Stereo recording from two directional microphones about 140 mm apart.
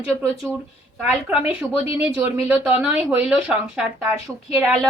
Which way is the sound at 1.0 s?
10° right (ahead or behind).